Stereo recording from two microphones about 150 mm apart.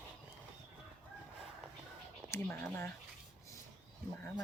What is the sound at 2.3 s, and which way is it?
Speech, 15° left (ahead or behind).